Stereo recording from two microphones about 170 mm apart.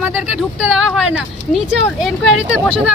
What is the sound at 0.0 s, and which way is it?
Speech, 10° right (ahead or behind).